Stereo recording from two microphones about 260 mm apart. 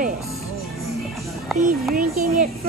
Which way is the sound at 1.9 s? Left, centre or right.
Right.